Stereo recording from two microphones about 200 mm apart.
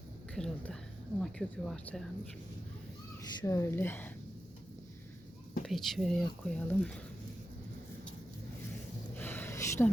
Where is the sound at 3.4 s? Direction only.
15° left (ahead or behind).